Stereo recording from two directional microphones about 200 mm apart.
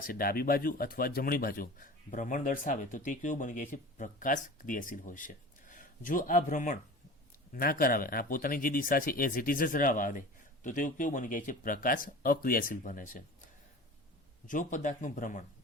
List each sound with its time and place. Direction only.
0.0 s speech: 45° left (ahead or behind)
14.4 s speech: 40° left (ahead or behind)